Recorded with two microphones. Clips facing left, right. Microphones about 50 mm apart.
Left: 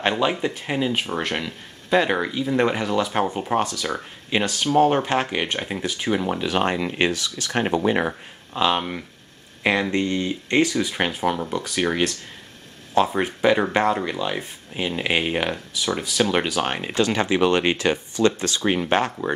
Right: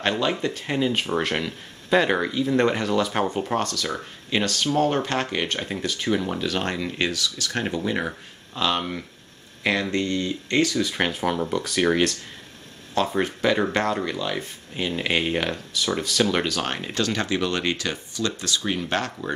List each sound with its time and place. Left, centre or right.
0.0 s speech: centre; by 8.1 s left
8.5 s speech: centre